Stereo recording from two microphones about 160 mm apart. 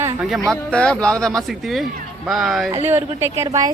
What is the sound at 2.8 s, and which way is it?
Speech, 15° right (ahead or behind).